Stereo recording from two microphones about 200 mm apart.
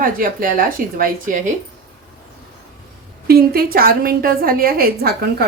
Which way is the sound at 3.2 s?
50° right (ahead or behind).